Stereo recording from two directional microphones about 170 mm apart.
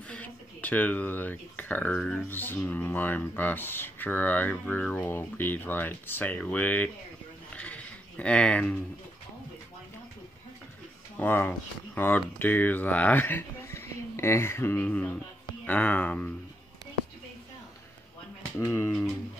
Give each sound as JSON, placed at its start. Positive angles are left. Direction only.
{"t": 0.1, "sound": "speech", "side_deg": 10}
{"t": 7.5, "sound": "a sound", "side_deg": 10}
{"t": 11.1, "sound": "speech", "side_deg": 10}
{"t": 18.6, "sound": "speech", "side_deg": 15}
{"t": 18.9, "sound": "speech", "side_deg": 5}